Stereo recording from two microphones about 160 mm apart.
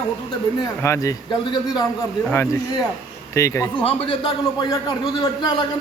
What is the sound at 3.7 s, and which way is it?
A man's voice, 35° left (ahead or behind).